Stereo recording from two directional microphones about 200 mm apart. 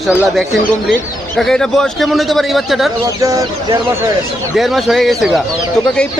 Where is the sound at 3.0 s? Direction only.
15° right (ahead or behind).